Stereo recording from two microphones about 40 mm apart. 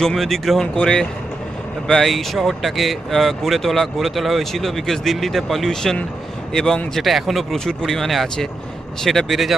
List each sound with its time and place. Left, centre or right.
0.0 s speech: centre
0.6 s speech: centre
2.0 s a man's voice: centre
6.9 s speech: centre
7.5 s speech: centre
7.9 s speech: centre